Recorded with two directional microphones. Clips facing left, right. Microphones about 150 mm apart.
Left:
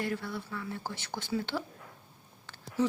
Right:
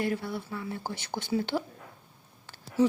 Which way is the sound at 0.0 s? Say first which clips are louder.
Right 4 dB; 15° right (ahead or behind).